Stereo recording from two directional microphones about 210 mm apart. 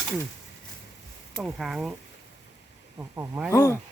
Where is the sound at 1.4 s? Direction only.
Centre (ahead or behind).